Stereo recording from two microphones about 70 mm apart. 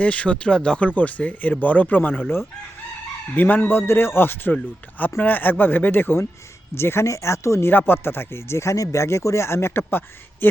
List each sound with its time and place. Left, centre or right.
0.0 s speech: centre; by 7.7 s left
7.7 s speech: left